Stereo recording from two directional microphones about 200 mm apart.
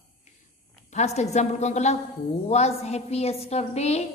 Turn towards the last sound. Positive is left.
turn(degrees=30)  # may be behind; listen again after turning